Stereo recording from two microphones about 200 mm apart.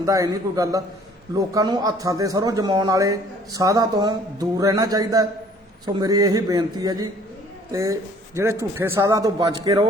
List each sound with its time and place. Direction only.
0.0 s a man's voice: 15° right (ahead or behind)